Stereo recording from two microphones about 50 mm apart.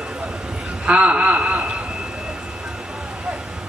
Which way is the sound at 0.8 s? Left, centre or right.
Right.